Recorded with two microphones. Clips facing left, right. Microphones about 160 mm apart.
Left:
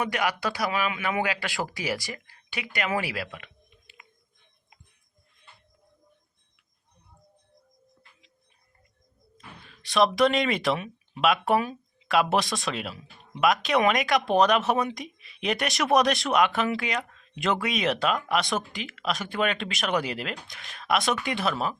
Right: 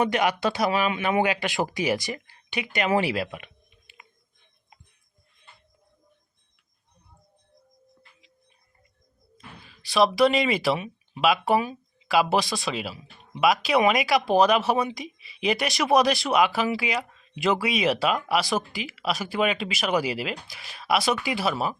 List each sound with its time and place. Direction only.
0.0 s speech: 25° right (ahead or behind)
9.6 s a sound: centre (ahead or behind)
10.2 s speech: 5° right (ahead or behind)